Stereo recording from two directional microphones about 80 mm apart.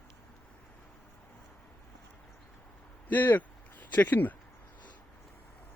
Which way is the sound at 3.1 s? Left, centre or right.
Left.